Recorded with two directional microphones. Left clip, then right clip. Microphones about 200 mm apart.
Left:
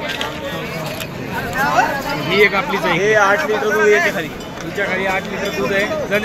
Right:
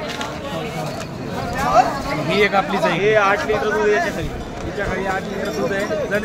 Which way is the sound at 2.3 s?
55° right (ahead or behind).